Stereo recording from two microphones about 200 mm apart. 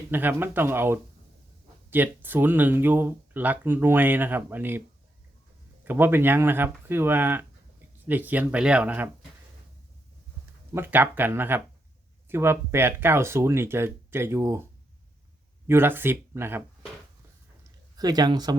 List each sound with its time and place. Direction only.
0.1 s speech: 10° right (ahead or behind)
5.8 s speech: 10° right (ahead or behind)
10.8 s speech: 10° right (ahead or behind)
17.6 s a sound: 20° right (ahead or behind)